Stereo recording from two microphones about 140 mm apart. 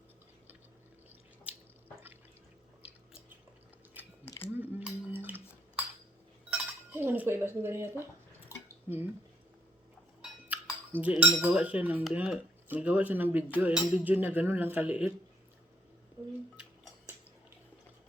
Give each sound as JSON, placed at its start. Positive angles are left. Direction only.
{"t": 1.5, "sound": "drip", "side_deg": -10}
{"t": 4.5, "sound": "cutlery", "side_deg": -15}
{"t": 6.5, "sound": "chink", "side_deg": -15}
{"t": 8.4, "sound": "a sound", "side_deg": -15}
{"t": 10.5, "sound": "dishes", "side_deg": -10}
{"t": 11.0, "sound": "speech", "side_deg": -10}